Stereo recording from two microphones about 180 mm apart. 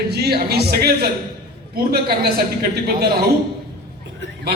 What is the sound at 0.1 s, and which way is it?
A man's voice, 60° right (ahead or behind).